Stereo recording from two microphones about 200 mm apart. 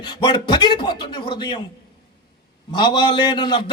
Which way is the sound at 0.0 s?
20° left (ahead or behind).